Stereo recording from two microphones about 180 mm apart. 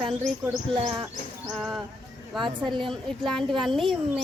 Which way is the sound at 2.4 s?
25° right (ahead or behind).